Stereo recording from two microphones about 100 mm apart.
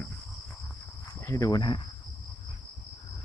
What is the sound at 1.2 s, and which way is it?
Speech, 35° left (ahead or behind).